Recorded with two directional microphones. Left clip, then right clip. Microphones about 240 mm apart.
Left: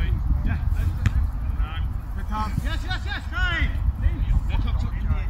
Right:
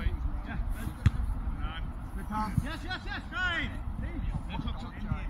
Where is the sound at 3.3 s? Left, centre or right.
Centre.